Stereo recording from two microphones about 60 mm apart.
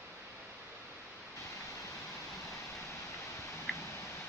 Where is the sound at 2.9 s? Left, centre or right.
Left.